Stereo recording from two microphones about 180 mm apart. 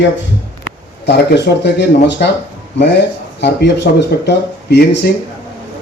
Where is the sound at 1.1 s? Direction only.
70° left (ahead or behind).